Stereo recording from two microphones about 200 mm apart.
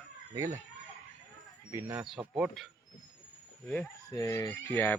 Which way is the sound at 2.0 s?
5° right (ahead or behind).